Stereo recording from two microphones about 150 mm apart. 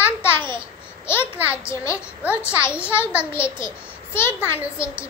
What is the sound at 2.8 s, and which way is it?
Speech, 15° left (ahead or behind).